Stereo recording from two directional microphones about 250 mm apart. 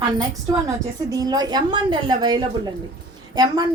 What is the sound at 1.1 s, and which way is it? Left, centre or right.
A woman's voice, centre.